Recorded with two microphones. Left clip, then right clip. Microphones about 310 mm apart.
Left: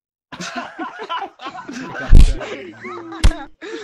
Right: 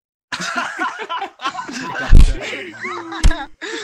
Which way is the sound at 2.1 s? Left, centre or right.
Centre.